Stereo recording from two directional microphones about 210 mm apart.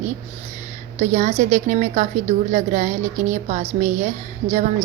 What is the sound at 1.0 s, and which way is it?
A woman's voice, 35° right (ahead or behind).